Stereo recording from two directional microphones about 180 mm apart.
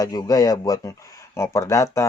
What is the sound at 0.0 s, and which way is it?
Speech, 20° left (ahead or behind).